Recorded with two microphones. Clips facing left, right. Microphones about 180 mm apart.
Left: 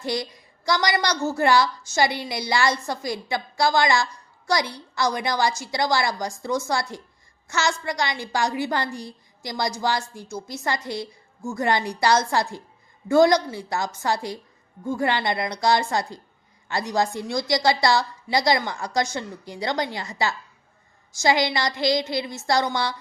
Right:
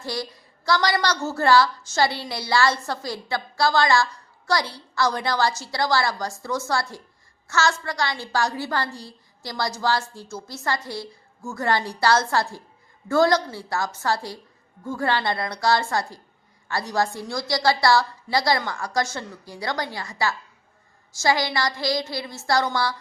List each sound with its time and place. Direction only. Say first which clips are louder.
0.0 s a woman's voice: left 3 dB; 20° left (ahead or behind)